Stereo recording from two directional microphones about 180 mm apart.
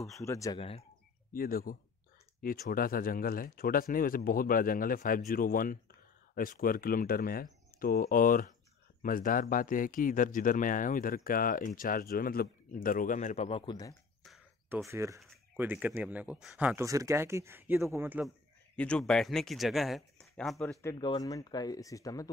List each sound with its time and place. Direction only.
0.2 s speech: 15° left (ahead or behind)
0.6 s speech: 35° left (ahead or behind)
1.3 s speech: 55° left (ahead or behind); by 13.9 s 25° left (ahead or behind)
14.9 s speech: 15° right (ahead or behind)
18.8 s speech: 5° left (ahead or behind)
20.8 s speech: 25° left (ahead or behind)